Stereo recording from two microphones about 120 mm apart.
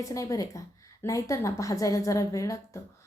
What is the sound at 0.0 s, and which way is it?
A woman's voice, 25° left (ahead or behind).